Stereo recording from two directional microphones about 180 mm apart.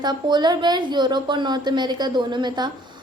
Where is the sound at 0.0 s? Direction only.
25° right (ahead or behind).